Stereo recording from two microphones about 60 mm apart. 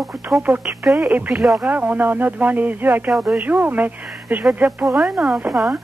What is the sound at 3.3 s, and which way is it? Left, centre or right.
Speech, right.